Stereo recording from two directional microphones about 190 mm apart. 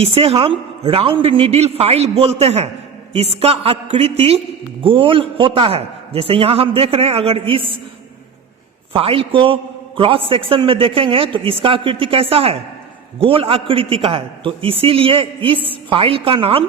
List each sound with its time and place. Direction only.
0.0 s a man's voice: 30° right (ahead or behind)
8.9 s a man's voice: 30° right (ahead or behind)